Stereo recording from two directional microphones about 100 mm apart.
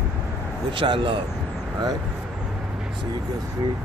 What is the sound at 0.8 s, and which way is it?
Speech, 55° right (ahead or behind).